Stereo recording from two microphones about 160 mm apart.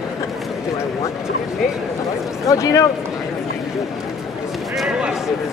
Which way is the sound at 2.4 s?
20° left (ahead or behind).